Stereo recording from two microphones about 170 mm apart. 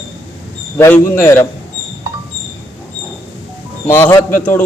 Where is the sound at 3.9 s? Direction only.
15° left (ahead or behind).